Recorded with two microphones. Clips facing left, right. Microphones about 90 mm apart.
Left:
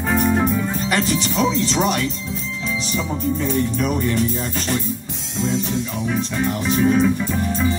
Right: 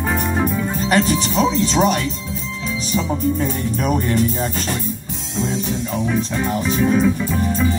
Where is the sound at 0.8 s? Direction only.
45° right (ahead or behind).